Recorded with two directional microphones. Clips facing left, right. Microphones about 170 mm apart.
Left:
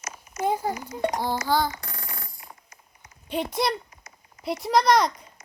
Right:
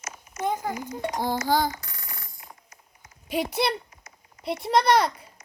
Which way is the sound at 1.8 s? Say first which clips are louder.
Left 4 dB; 55° left (ahead or behind).